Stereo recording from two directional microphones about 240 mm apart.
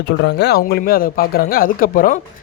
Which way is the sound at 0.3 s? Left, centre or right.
Left.